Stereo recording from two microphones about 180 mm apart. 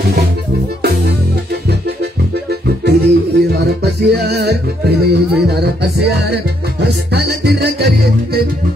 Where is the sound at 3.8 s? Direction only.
65° right (ahead or behind).